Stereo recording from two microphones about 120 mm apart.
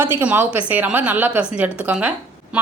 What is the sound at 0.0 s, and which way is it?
A woman's voice, 15° right (ahead or behind).